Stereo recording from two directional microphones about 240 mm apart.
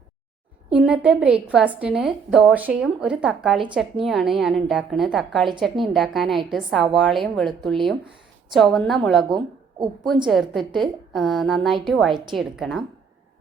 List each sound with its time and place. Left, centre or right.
0.7 s a woman's voice: centre
9.3 s a woman's voice: centre
10.2 s a woman's voice: centre